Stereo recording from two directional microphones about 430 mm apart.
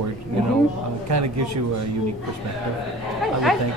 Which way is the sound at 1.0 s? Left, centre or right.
Right.